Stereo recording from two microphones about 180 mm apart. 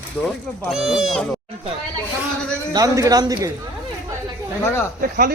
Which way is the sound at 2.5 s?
20° right (ahead or behind).